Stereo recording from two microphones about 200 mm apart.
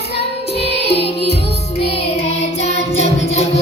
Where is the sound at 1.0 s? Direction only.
30° left (ahead or behind).